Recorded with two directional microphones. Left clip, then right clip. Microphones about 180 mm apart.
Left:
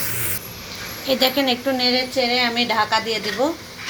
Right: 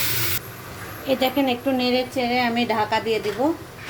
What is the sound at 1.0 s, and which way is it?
A woman's voice, 5° right (ahead or behind).